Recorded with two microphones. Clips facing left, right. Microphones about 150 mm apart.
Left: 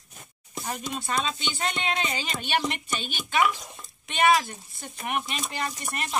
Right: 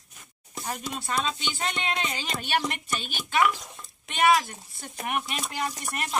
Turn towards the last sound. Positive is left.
turn(degrees=-5)  # may be behind; listen again after turning